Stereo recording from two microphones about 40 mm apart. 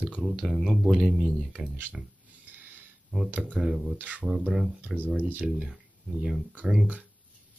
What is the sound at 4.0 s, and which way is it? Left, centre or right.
Speech, right.